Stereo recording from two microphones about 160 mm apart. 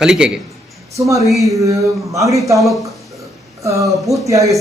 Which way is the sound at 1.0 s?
20° right (ahead or behind).